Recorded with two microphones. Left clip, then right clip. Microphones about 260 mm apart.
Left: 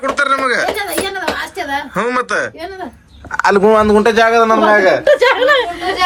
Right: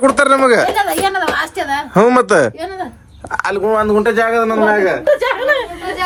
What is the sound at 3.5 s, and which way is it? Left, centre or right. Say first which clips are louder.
Speech: left 4 dB; left.